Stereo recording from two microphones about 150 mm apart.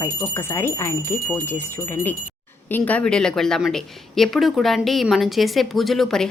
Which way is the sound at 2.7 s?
10° left (ahead or behind).